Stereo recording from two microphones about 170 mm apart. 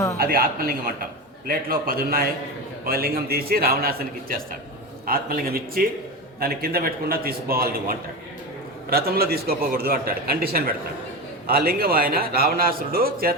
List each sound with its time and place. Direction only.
0.2 s a man's voice: 60° right (ahead or behind)